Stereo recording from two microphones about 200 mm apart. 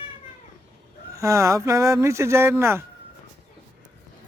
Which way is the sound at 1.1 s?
15° right (ahead or behind).